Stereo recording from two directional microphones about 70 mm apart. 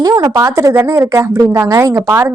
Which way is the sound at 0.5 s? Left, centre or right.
Right.